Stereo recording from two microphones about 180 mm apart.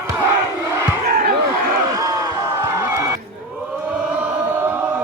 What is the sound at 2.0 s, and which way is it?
Slam, 15° right (ahead or behind).